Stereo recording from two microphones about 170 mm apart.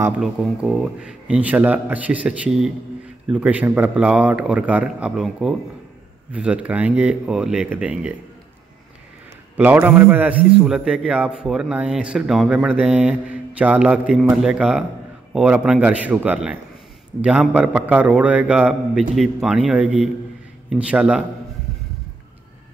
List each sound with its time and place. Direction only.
0.2 s a man's voice: centre (ahead or behind)
9.6 s a man's voice: 10° right (ahead or behind)